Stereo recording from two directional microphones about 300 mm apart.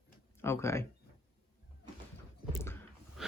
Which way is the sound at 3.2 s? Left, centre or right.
Centre.